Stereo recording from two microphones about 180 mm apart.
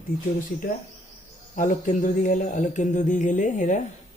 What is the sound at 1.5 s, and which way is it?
Speech, 45° left (ahead or behind).